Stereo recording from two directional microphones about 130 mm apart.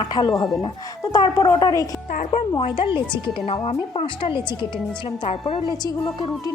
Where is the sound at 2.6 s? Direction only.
40° left (ahead or behind).